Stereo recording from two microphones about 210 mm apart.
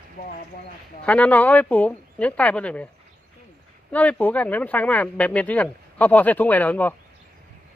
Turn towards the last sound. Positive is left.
turn(degrees=10)  # may be behind; listen again after turning